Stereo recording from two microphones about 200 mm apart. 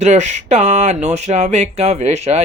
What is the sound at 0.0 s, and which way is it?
Speech, 35° right (ahead or behind).